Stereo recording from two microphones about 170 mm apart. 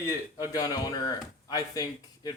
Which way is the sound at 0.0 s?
25° left (ahead or behind).